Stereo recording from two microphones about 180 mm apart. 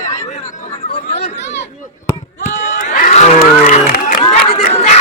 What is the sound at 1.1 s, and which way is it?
Chatter, 40° left (ahead or behind).